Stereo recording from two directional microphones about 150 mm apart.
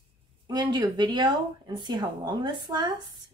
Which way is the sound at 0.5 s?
30° right (ahead or behind).